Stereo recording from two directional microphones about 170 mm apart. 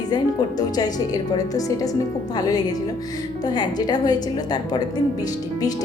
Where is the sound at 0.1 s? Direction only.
25° left (ahead or behind).